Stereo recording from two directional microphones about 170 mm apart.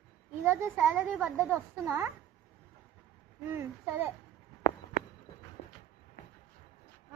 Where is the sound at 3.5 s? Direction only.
15° right (ahead or behind).